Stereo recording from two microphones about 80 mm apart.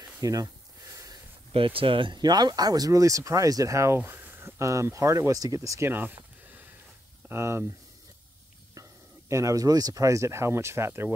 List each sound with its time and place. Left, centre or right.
0.0 s snake: right
0.9 s a sound: right
1.6 s speech: right
5.9 s a sound: right
7.2 s speech: right
9.3 s speech: right